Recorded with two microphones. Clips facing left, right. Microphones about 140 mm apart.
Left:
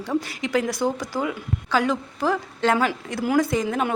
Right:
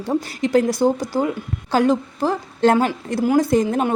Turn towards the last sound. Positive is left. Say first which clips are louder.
# right 5 dB
turn(degrees=-35)  # may be behind; listen again after turning